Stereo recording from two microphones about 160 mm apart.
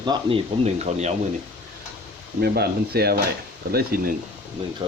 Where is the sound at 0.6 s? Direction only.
45° right (ahead or behind).